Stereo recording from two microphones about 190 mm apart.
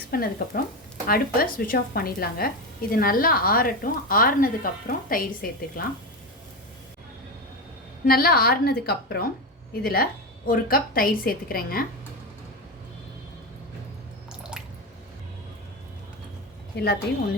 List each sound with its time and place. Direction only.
0.1 s speech: 50° left (ahead or behind)
8.0 s speech: 50° left (ahead or behind)
16.7 s a woman's voice: 60° left (ahead or behind)